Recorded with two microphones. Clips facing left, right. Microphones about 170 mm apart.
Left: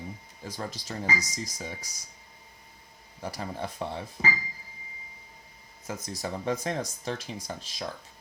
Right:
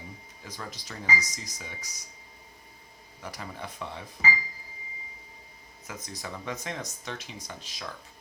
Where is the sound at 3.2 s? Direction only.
30° left (ahead or behind).